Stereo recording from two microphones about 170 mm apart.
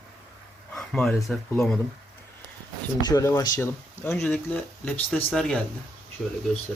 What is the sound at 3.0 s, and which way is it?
Speech, 20° left (ahead or behind).